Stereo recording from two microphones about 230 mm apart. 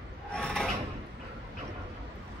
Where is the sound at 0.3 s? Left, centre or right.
Centre.